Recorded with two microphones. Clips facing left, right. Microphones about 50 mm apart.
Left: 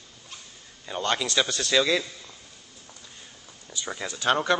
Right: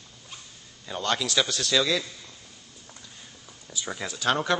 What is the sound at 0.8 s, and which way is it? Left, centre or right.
A man's voice, centre.